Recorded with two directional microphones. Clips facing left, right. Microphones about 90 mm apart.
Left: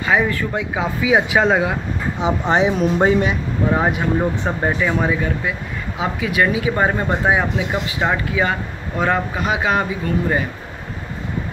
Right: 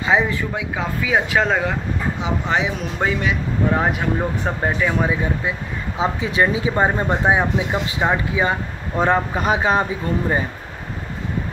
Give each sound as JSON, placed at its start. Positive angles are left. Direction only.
{"t": 0.0, "sound": "speech", "side_deg": -20}
{"t": 0.7, "sound": "speech", "side_deg": 10}
{"t": 2.2, "sound": "speech", "side_deg": 25}
{"t": 3.7, "sound": "speech", "side_deg": 5}
{"t": 5.9, "sound": "speech", "side_deg": -30}